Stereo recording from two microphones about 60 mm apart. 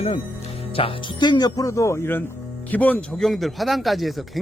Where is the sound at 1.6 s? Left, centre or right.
Left.